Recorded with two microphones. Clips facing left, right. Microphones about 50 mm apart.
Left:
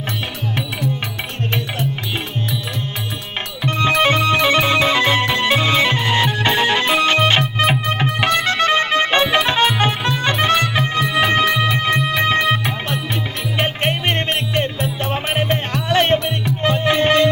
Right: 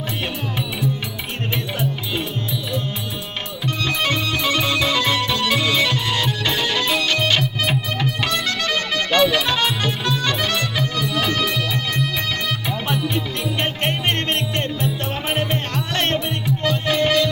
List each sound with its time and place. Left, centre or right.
3.6 s music: left
13.6 s music: centre
16.2 s music: left